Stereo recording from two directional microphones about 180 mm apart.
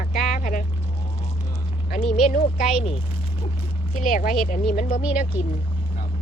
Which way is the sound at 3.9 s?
50° left (ahead or behind).